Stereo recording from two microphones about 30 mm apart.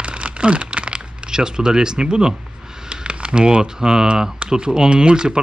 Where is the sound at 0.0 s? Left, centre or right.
Right.